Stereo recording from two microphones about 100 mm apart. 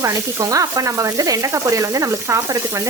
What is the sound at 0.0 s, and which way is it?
Sizzle, 30° right (ahead or behind).